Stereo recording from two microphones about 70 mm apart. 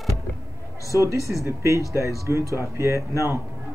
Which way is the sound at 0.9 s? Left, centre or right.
Right.